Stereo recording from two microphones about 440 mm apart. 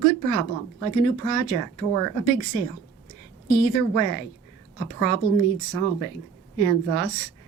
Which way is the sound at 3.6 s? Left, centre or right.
Right.